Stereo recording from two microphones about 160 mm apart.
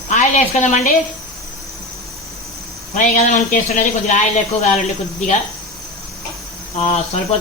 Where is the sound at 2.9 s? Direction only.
50° left (ahead or behind).